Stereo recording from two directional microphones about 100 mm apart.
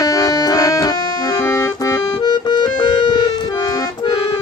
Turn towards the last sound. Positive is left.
turn(degrees=50)  # may be behind; listen again after turning